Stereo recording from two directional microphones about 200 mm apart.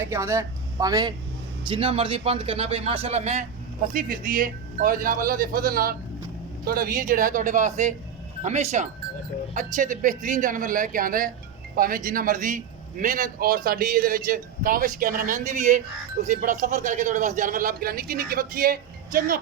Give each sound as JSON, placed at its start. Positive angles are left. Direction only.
{"t": 0.0, "sound": "a man's voice", "side_deg": -15}
{"t": 3.9, "sound": "a man's voice", "side_deg": -45}